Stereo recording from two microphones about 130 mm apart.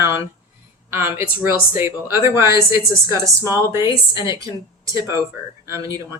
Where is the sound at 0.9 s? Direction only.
20° right (ahead or behind).